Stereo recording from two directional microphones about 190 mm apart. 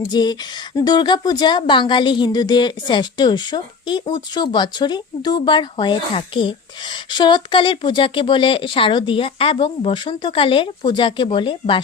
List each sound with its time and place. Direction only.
0.1 s speech: 20° left (ahead or behind)